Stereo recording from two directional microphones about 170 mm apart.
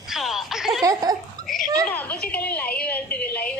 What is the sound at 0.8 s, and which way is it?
Speech, 20° right (ahead or behind).